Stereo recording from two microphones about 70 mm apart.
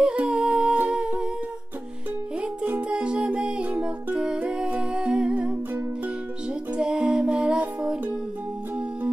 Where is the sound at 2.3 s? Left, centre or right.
Centre.